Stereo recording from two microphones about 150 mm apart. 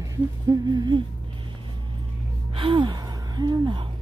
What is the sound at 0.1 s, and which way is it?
Speech, 25° right (ahead or behind).